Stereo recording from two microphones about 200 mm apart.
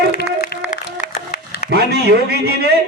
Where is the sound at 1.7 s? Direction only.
55° right (ahead or behind).